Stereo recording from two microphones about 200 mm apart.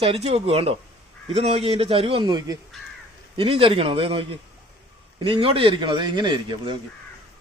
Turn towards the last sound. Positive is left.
turn(degrees=-20)  # may be behind; listen again after turning